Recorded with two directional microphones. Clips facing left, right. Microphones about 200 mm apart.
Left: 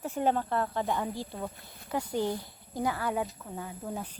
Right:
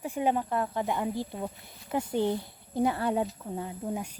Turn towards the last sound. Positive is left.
turn(degrees=-15)  # may be behind; listen again after turning